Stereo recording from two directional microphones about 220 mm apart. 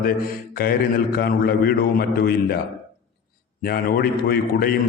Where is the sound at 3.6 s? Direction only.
45° left (ahead or behind).